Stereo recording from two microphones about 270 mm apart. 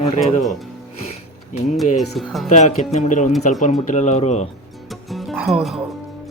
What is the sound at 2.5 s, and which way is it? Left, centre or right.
Speech, left.